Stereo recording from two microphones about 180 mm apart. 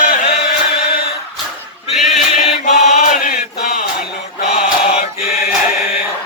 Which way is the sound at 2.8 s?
45° left (ahead or behind).